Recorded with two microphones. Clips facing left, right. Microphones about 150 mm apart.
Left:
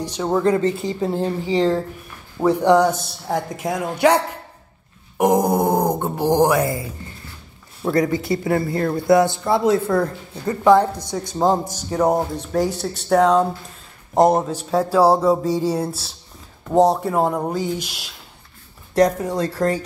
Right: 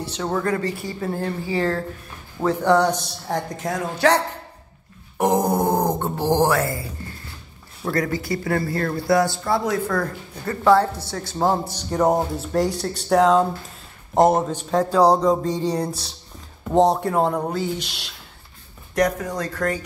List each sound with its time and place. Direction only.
0.0 s speech: 15° left (ahead or behind)
11.9 s speech: centre (ahead or behind)
18.9 s speech: 30° left (ahead or behind)